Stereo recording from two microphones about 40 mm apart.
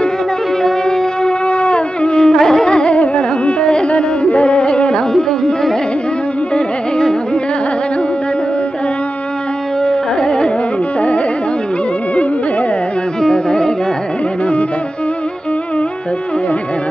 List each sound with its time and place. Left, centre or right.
0.6 s music: centre
1.5 s carnatic music: left
9.8 s carnatic music: left
13.2 s carnatic music: centre